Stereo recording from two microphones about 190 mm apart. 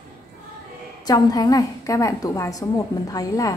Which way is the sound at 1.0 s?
20° left (ahead or behind).